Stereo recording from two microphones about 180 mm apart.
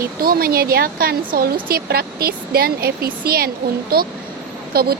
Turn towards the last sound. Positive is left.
turn(degrees=-55)  # may be behind; listen again after turning